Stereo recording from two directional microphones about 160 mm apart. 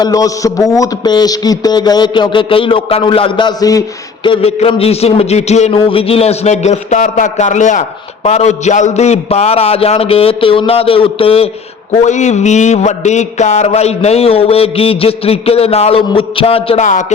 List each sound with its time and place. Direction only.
0.0 s a man's voice: 20° left (ahead or behind)
12.0 s a man's voice: 45° left (ahead or behind)
16.8 s speech: 50° left (ahead or behind)